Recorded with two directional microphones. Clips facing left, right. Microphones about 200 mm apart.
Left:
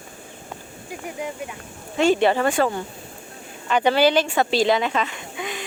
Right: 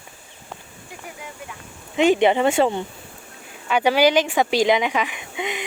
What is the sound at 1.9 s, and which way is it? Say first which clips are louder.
Speech: right 2 dB; 15° right (ahead or behind).